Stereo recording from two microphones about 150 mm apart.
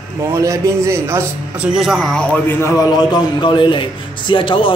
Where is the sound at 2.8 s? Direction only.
25° left (ahead or behind).